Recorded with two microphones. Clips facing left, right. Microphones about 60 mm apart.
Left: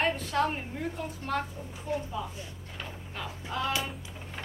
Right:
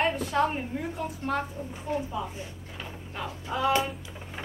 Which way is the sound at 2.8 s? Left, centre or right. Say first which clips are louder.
Right 3 dB; centre.